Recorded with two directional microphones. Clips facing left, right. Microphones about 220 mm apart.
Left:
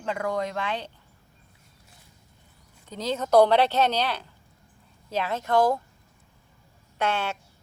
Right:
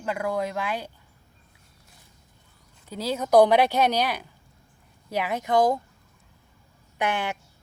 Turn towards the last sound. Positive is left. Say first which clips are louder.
# even
turn(degrees=-15)  # may be behind; listen again after turning